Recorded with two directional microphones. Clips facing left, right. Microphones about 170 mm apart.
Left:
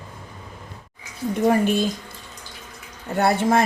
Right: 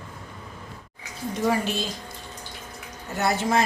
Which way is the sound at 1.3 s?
55° left (ahead or behind).